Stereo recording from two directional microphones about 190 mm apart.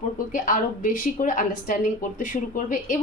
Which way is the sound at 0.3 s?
45° left (ahead or behind).